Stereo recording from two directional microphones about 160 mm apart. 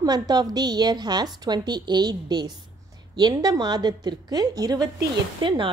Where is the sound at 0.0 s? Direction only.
25° right (ahead or behind).